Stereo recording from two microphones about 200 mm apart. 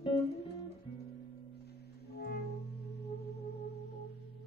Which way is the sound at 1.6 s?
55° left (ahead or behind).